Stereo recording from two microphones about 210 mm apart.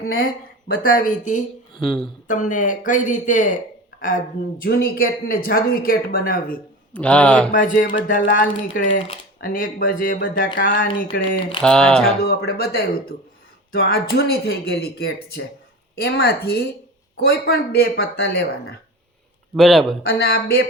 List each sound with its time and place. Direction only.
0.8 s speech: 40° left (ahead or behind)
1.8 s speech: centre (ahead or behind)
2.2 s speech: 40° left (ahead or behind)
6.9 s speech: 5° left (ahead or behind)
7.5 s speech: 40° left (ahead or behind)
11.6 s speech: 5° left (ahead or behind)
12.2 s speech: 50° left (ahead or behind)
19.5 s speech: centre (ahead or behind)
20.1 s speech: 50° left (ahead or behind)